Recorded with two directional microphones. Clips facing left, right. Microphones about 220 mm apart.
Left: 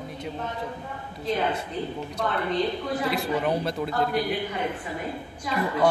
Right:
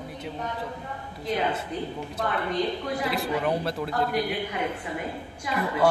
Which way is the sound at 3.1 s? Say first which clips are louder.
Left 1 dB; centre (ahead or behind).